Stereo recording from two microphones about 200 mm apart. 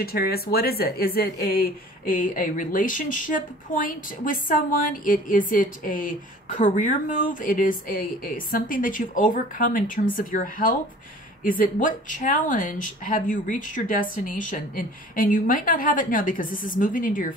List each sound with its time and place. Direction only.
0.0 s speech: 50° left (ahead or behind)